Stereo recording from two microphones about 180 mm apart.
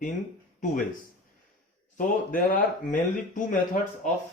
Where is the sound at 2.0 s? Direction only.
45° left (ahead or behind).